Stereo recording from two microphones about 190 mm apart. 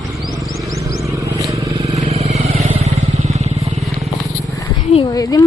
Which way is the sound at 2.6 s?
35° right (ahead or behind).